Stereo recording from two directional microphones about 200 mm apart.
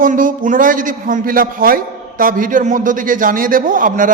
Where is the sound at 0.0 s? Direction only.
40° right (ahead or behind).